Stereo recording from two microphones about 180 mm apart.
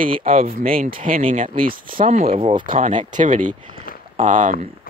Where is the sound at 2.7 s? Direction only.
45° right (ahead or behind).